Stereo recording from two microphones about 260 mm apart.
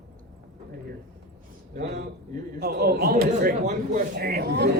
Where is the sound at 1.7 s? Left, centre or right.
Right.